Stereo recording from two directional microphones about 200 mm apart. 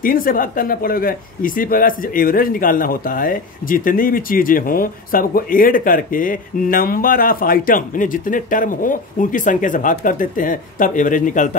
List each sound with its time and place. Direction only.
0.0 s speech: 45° left (ahead or behind)